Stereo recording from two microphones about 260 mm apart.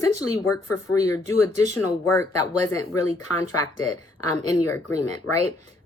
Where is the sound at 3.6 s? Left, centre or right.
Left.